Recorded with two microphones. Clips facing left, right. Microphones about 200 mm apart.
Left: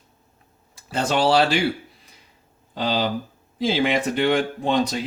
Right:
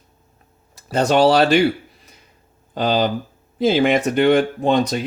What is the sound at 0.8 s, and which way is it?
Speech, 40° right (ahead or behind).